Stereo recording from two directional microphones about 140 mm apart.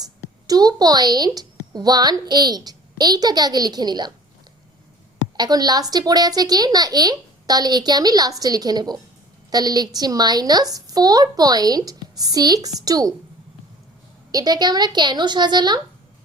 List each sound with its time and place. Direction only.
0.0 s a woman's voice: 25° right (ahead or behind)
5.4 s a woman's voice: 30° right (ahead or behind)
14.3 s a woman's voice: 30° right (ahead or behind)